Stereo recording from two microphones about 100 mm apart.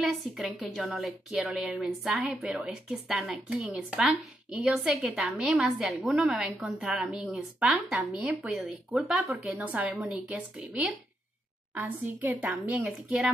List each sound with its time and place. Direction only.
0.0 s a woman's voice: centre (ahead or behind); by 12.4 s 20° right (ahead or behind)
12.4 s a woman's voice: 5° right (ahead or behind)